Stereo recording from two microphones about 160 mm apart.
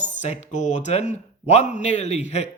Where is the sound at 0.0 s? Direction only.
50° left (ahead or behind).